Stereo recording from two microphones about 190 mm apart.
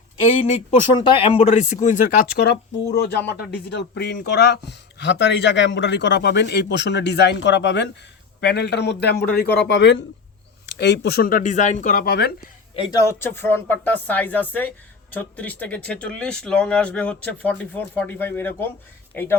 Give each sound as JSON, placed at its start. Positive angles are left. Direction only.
{"t": 1.2, "sound": "speech", "side_deg": 30}
{"t": 2.4, "sound": "speech", "side_deg": 60}
{"t": 12.7, "sound": "speech", "side_deg": 25}